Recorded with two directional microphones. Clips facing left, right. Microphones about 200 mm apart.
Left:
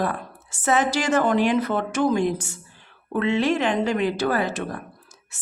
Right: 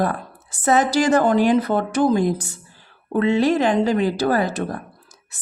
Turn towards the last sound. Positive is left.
turn(degrees=-35)  # may be behind; listen again after turning